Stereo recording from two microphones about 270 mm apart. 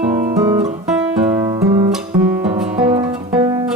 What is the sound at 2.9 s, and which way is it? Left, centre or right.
Music, centre.